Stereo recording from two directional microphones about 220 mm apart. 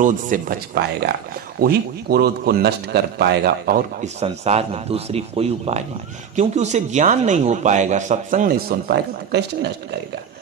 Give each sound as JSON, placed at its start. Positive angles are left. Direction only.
{"t": 0.0, "sound": "a man's voice", "side_deg": -40}